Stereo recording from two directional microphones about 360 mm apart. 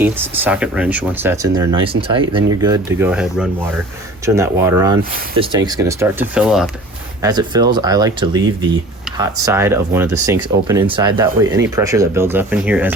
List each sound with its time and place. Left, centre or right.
0.0 s speech: centre